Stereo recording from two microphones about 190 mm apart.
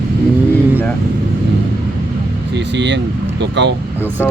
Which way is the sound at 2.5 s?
65° right (ahead or behind).